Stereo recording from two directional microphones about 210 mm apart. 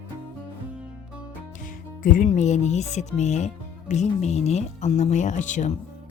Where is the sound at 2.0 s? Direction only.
35° left (ahead or behind).